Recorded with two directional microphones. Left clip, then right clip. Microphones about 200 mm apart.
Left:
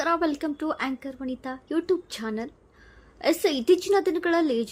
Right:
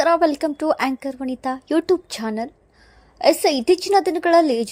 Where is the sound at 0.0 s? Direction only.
30° right (ahead or behind).